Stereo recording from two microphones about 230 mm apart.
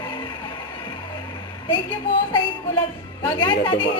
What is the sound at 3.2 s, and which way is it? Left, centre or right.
Speech, centre.